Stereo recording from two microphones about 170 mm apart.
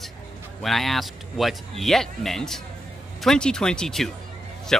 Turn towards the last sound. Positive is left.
turn(degrees=5)  # may be behind; listen again after turning